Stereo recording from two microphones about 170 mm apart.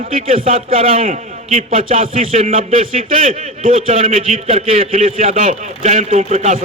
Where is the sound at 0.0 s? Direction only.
55° right (ahead or behind).